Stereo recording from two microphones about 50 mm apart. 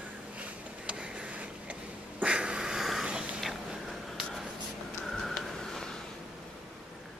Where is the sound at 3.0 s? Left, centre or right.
Right.